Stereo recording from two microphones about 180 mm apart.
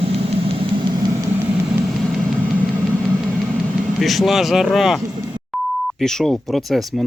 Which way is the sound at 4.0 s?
Centre (ahead or behind).